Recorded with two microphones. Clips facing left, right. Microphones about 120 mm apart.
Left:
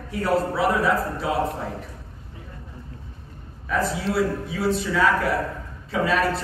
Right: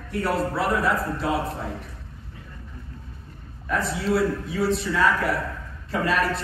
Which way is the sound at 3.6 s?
Centre (ahead or behind).